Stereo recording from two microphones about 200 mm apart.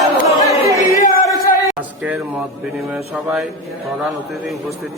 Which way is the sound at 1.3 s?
5° right (ahead or behind).